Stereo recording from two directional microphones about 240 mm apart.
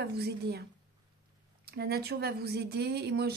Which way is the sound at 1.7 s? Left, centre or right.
Right.